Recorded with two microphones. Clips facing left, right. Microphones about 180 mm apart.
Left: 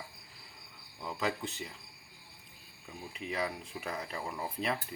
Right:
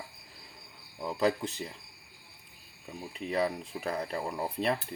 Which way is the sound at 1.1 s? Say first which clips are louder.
Right 6 dB; 35° right (ahead or behind).